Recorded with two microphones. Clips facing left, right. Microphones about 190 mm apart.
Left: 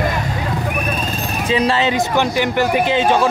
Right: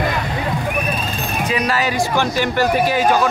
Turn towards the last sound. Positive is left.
turn(degrees=25)  # may be behind; listen again after turning